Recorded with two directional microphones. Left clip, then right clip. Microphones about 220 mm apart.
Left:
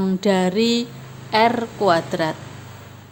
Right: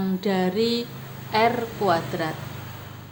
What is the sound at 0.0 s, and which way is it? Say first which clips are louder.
A woman's voice: left 5 dB; 30° left (ahead or behind).